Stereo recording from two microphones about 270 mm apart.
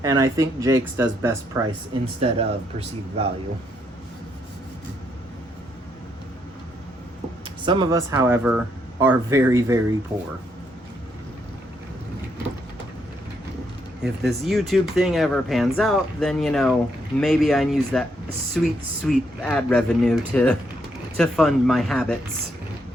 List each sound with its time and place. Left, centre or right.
0.0 s speech: centre
2.2 s speech: right
7.6 s speech: centre
14.0 s speech: centre